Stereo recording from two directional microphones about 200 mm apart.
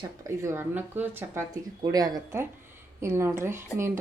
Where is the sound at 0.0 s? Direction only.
15° right (ahead or behind).